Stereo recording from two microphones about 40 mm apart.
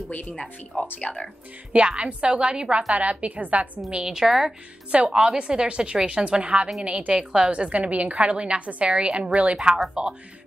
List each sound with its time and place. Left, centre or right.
0.7 s speech: left
1.7 s a woman's voice: right
2.9 s a woman's voice: right
4.0 s a woman's voice: centre
5.0 s a woman's voice: centre